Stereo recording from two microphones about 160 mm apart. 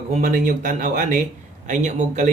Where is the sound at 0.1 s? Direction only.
55° right (ahead or behind).